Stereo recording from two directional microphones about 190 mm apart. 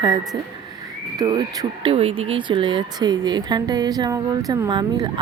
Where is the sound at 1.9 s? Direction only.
30° right (ahead or behind).